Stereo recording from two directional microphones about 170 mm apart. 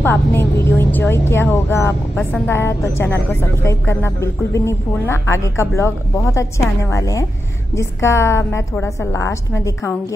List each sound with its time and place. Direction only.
0.0 s a woman's voice: 10° left (ahead or behind)